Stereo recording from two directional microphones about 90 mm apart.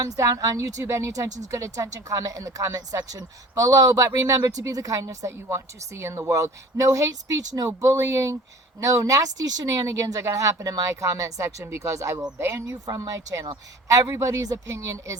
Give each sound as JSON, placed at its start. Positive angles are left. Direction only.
{"t": 0.0, "sound": "a woman's voice", "side_deg": -40}
{"t": 12.8, "sound": "a woman's voice", "side_deg": -45}